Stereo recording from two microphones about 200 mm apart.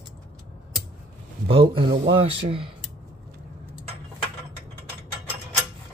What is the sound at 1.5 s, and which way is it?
Speech, 25° right (ahead or behind).